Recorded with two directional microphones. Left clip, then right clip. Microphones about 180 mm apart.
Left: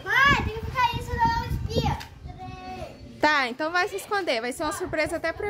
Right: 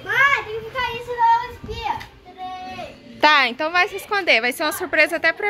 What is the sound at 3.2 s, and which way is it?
Speech, 15° left (ahead or behind).